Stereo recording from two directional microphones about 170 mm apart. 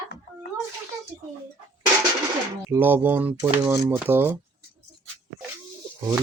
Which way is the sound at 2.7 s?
10° right (ahead or behind).